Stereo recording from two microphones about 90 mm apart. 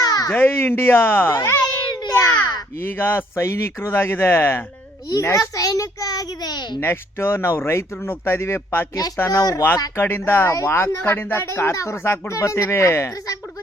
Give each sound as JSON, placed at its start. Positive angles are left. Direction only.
{"t": 0.0, "sound": "a sound", "side_deg": 45}
{"t": 0.3, "sound": "speech", "side_deg": 25}
{"t": 1.6, "sound": "a sound", "side_deg": 50}
{"t": 2.8, "sound": "speech", "side_deg": 25}
{"t": 5.2, "sound": "a child's voice", "side_deg": 40}
{"t": 6.7, "sound": "speech", "side_deg": 25}
{"t": 9.4, "sound": "speech", "side_deg": 40}
{"t": 10.0, "sound": "speech", "side_deg": 25}